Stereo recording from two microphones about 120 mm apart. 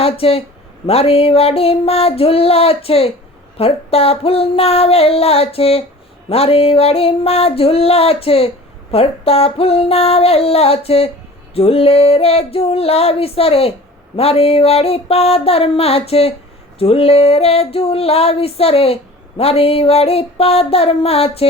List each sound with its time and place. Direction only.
0.0 s speech: 55° left (ahead or behind)
0.9 s music: 55° left (ahead or behind)